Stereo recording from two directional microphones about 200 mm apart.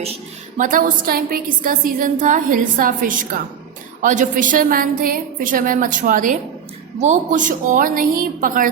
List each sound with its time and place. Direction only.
0.0 s a woman's voice: 35° right (ahead or behind)